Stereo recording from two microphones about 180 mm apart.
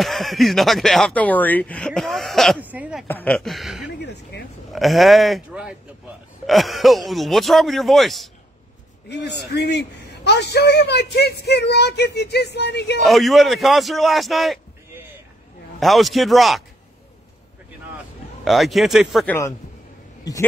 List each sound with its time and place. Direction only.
0.0 s speech: centre (ahead or behind)
3.1 s speech: 5° left (ahead or behind)
4.0 s a sound: 70° left (ahead or behind)
4.7 s speech: centre (ahead or behind)
9.1 s a man's voice: 65° left (ahead or behind)
13.0 s speech: centre (ahead or behind)
15.8 s speech: centre (ahead or behind)
17.9 s a sound: centre (ahead or behind)
19.1 s a man's voice: 10° left (ahead or behind)